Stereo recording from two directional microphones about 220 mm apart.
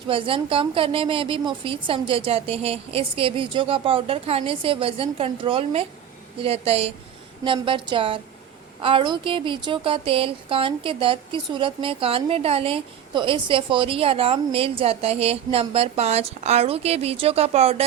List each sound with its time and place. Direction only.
0.1 s speech: 25° right (ahead or behind)